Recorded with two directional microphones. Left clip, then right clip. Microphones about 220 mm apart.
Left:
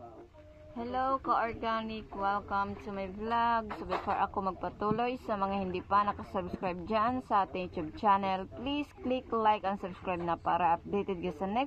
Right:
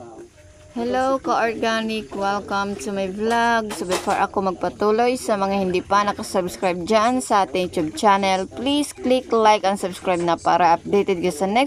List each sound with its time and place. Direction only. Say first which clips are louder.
0.7 s a woman's voice: right 11 dB; 20° right (ahead or behind)